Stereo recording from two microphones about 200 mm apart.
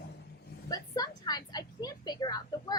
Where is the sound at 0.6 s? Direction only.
20° left (ahead or behind).